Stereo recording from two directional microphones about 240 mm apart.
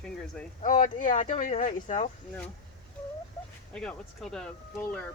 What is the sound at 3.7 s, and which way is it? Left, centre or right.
Speech, centre.